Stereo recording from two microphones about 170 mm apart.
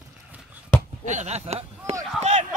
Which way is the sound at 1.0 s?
40° right (ahead or behind).